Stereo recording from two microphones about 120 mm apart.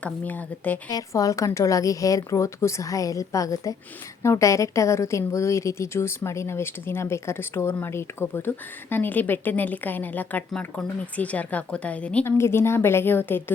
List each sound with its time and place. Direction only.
0.0 s speech: 15° left (ahead or behind)
0.9 s a woman's voice: 30° left (ahead or behind); by 12.3 s 10° left (ahead or behind)
12.4 s a woman's voice: 20° left (ahead or behind)